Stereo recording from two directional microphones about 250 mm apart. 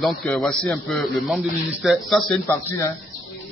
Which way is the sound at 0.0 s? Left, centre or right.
Centre.